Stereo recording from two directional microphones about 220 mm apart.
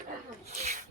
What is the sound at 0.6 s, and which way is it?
Snake, 30° right (ahead or behind).